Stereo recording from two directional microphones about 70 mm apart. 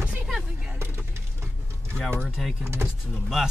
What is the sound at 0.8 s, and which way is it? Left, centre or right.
Vehicle, right.